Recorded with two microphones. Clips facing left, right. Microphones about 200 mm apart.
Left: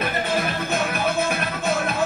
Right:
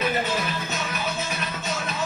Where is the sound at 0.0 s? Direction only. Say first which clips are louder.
Left 1 dB; 55° left (ahead or behind).